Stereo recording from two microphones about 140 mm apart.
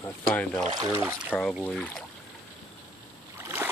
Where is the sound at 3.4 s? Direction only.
15° right (ahead or behind).